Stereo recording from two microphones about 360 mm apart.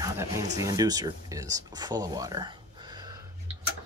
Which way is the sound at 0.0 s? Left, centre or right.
Centre.